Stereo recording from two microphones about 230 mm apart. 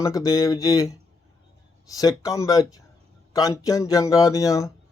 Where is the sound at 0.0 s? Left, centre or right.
Centre.